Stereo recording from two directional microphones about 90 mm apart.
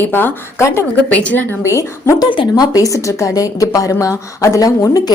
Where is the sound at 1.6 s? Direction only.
30° left (ahead or behind).